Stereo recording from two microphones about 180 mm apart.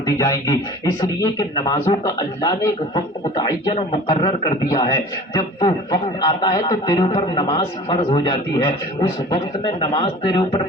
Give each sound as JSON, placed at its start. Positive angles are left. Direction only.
{"t": 0.0, "sound": "a man's voice", "side_deg": 20}